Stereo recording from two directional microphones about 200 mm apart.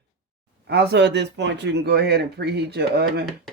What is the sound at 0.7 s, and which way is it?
Speech, 55° right (ahead or behind).